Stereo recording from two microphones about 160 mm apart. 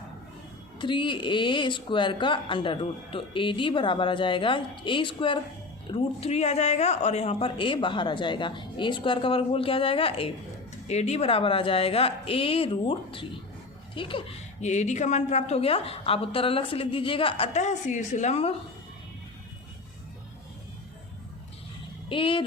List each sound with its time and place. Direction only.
0.8 s speech: 30° left (ahead or behind)
14.6 s speech: 45° left (ahead or behind)
22.1 s speech: 30° left (ahead or behind)